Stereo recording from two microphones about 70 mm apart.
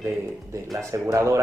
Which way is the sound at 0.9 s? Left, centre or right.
Right.